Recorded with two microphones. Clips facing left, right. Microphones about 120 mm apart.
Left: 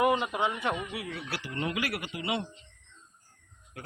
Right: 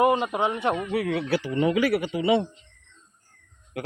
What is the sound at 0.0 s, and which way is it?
Speech, 30° right (ahead or behind).